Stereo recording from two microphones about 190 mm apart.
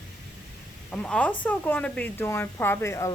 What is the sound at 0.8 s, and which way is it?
Speech, 5° left (ahead or behind).